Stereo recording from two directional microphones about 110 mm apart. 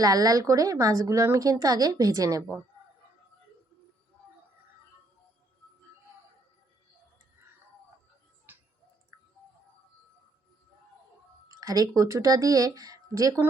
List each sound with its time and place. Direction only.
0.0 s speech: 35° right (ahead or behind)
11.6 s speech: 35° right (ahead or behind)